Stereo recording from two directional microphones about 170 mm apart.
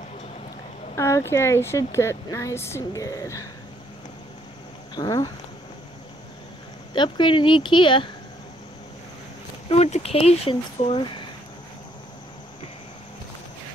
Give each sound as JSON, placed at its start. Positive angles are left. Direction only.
{"t": 0.9, "sound": "speech", "side_deg": 15}
{"t": 4.9, "sound": "speech", "side_deg": 25}
{"t": 6.9, "sound": "speech", "side_deg": 30}
{"t": 9.7, "sound": "speech", "side_deg": 40}